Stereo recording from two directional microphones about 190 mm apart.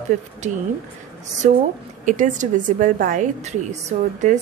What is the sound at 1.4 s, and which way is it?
A woman's voice, 40° right (ahead or behind).